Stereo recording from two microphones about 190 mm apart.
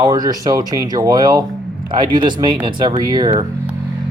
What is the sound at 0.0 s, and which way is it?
Speech, 20° right (ahead or behind).